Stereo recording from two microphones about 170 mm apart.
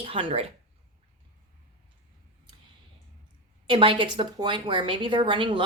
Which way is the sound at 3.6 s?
30° right (ahead or behind).